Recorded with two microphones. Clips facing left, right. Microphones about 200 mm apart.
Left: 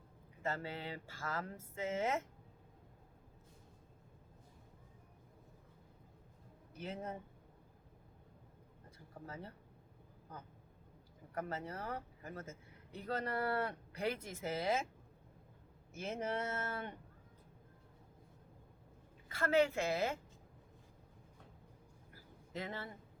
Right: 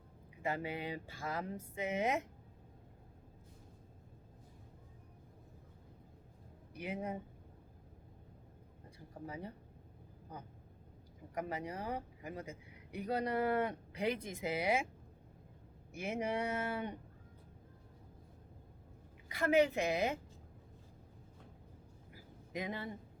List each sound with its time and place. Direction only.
0.4 s speech: 15° right (ahead or behind)
6.7 s speech: 15° right (ahead or behind)
9.2 s speech: 15° right (ahead or behind)
11.3 s speech: 15° right (ahead or behind)
15.9 s speech: 15° right (ahead or behind)
19.3 s speech: 15° right (ahead or behind)
22.1 s a sound: 15° right (ahead or behind)